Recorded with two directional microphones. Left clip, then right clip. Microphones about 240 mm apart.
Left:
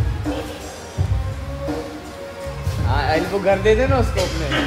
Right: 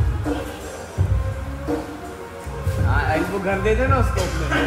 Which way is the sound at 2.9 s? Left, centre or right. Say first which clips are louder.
Left 3 dB; left.